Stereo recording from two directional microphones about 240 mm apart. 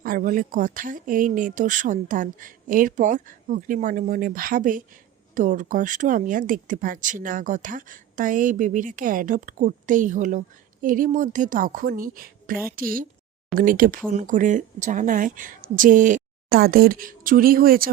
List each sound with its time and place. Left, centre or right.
0.0 s speech: right